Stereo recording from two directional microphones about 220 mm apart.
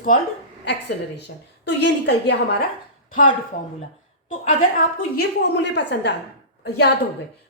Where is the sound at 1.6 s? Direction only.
50° left (ahead or behind).